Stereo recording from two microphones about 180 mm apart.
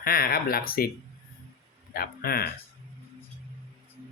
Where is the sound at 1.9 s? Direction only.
55° left (ahead or behind).